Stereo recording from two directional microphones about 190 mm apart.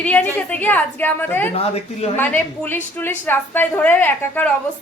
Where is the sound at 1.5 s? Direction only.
30° left (ahead or behind).